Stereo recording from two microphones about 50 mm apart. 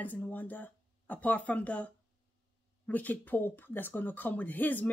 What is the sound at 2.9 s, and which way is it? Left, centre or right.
Speech, left.